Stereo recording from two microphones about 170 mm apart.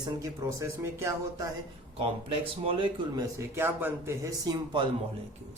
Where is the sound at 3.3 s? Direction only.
15° right (ahead or behind).